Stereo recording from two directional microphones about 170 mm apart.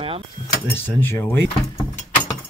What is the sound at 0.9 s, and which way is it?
Speech, 10° left (ahead or behind).